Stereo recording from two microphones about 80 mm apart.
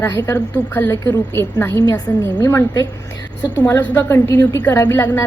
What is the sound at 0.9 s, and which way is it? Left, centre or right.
A woman's voice, left.